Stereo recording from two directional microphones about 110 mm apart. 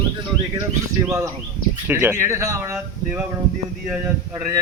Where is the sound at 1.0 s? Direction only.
25° right (ahead or behind).